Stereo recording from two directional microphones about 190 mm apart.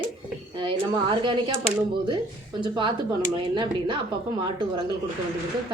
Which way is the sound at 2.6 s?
25° right (ahead or behind).